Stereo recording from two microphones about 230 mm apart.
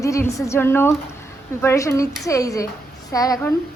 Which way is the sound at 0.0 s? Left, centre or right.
Centre.